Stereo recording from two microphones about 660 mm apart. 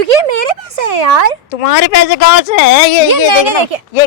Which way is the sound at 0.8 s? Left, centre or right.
Right.